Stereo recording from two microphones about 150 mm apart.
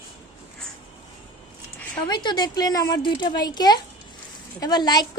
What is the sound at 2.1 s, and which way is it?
Speech, 30° left (ahead or behind).